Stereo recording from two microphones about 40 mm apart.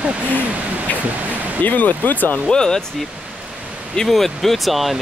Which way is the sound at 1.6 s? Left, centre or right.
Left.